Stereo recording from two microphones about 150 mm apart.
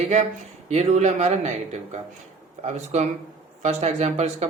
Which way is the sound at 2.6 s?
50° right (ahead or behind).